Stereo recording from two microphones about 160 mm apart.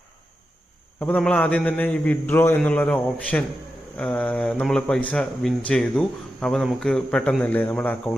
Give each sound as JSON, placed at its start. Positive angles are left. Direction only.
{"t": 0.9, "sound": "a man's voice", "side_deg": 10}